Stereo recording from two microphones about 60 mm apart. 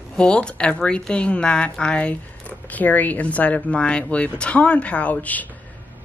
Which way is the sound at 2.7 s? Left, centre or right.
Left.